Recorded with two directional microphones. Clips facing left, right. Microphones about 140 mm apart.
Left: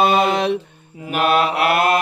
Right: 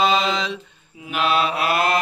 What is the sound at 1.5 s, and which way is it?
Mantra, 60° left (ahead or behind).